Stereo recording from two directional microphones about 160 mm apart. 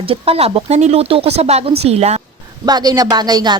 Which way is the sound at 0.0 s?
35° right (ahead or behind).